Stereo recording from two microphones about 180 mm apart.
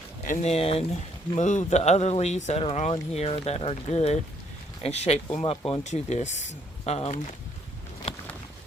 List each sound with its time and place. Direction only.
0.3 s speech: 35° left (ahead or behind)